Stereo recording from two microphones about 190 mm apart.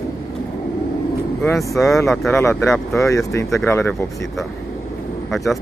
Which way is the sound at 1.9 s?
Centre (ahead or behind).